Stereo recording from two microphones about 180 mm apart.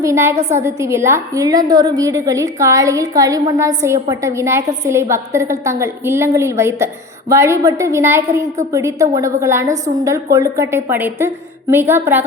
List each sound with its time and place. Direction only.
0.0 s a woman's voice: 15° right (ahead or behind)